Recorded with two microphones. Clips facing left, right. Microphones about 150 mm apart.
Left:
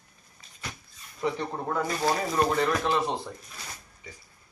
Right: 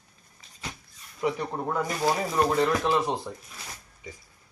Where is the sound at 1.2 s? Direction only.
10° right (ahead or behind).